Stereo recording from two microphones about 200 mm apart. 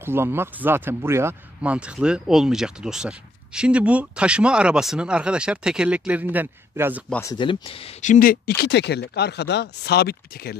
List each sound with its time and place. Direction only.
0.0 s speech: 10° right (ahead or behind)
7.1 s speech: 15° left (ahead or behind)
7.3 s speech: 25° left (ahead or behind); by 10.5 s 50° left (ahead or behind)